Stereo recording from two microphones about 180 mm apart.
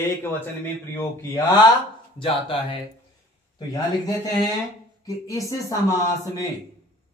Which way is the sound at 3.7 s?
20° left (ahead or behind).